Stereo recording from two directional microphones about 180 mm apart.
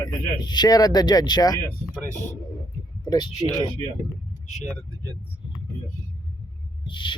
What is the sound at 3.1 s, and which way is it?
Speech, 20° left (ahead or behind).